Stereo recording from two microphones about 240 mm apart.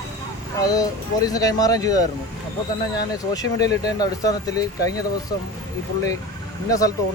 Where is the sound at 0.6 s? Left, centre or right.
Centre.